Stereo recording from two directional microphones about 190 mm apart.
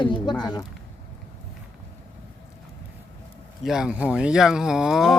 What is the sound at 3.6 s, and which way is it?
Speech, 5° right (ahead or behind).